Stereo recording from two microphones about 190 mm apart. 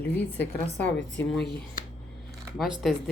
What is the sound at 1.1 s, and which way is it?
Speech, 5° left (ahead or behind).